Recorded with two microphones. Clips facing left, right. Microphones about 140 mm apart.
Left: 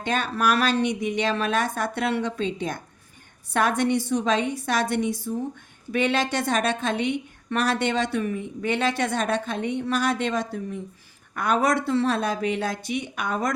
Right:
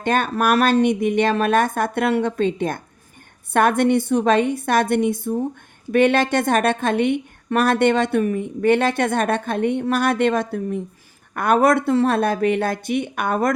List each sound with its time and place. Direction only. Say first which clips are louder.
0.0 s a woman's voice: right 5 dB; 55° right (ahead or behind)